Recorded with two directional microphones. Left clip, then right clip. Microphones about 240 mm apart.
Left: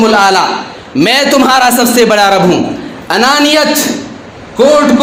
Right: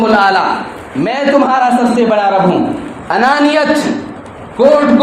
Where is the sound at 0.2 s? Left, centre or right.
Left.